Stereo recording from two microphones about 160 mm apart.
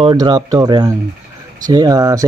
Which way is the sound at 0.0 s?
30° right (ahead or behind).